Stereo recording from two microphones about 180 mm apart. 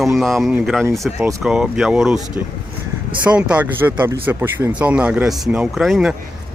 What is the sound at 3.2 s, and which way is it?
Speech, 5° right (ahead or behind).